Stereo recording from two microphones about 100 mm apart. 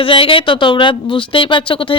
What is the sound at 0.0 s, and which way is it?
Speech, 60° left (ahead or behind).